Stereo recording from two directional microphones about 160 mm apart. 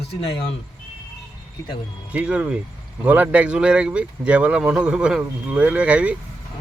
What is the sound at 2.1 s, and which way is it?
Speech, 5° right (ahead or behind).